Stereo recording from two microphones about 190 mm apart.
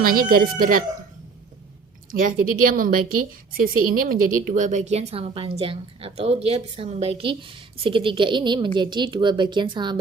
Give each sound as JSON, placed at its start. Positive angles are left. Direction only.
{"t": 0.0, "sound": "speech", "side_deg": -50}
{"t": 2.0, "sound": "a woman's voice", "side_deg": -45}